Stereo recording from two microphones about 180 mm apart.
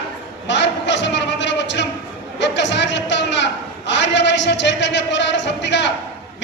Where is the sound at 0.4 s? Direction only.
80° left.